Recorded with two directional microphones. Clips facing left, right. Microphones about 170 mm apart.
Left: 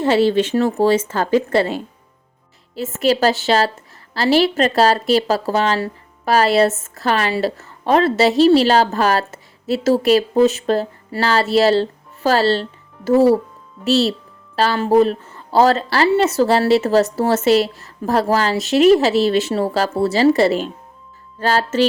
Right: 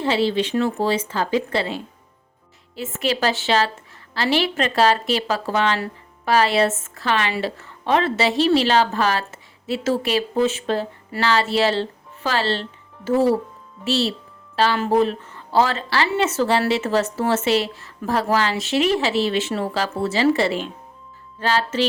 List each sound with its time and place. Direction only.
0.0 s speech: 45° left (ahead or behind)